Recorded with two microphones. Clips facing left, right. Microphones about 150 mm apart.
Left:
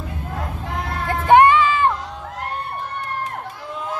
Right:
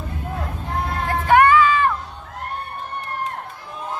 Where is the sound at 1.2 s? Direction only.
25° left (ahead or behind).